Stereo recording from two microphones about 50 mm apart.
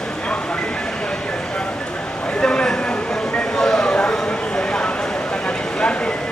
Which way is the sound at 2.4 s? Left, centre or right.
Centre.